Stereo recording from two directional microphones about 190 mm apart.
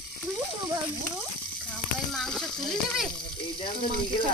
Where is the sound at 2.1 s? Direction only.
Centre (ahead or behind).